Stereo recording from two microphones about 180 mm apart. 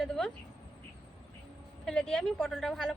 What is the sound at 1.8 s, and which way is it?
A woman's voice, 5° left (ahead or behind).